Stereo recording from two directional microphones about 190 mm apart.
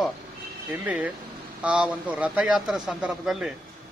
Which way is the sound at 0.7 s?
5° right (ahead or behind).